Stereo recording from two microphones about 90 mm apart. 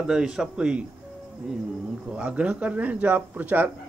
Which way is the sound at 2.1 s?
10° right (ahead or behind).